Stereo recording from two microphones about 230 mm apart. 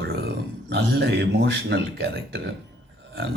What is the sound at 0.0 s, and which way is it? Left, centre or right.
Speech, right.